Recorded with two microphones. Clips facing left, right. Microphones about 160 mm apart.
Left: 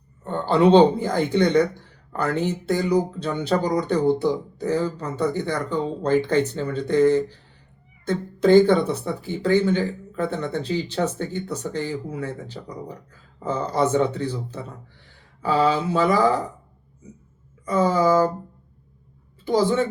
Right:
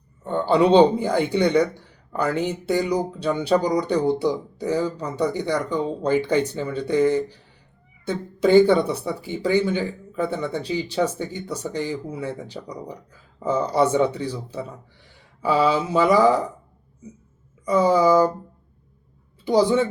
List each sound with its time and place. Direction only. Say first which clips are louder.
0.3 s speech: even; 10° right (ahead or behind)
17.7 s speech: right 2 dB; 15° right (ahead or behind)
19.5 s speech: right 2 dB; 15° right (ahead or behind)